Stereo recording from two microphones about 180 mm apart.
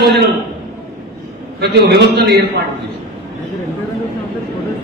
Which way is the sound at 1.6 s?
70° right (ahead or behind).